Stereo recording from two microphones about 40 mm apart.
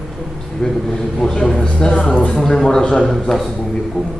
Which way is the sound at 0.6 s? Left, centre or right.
Centre.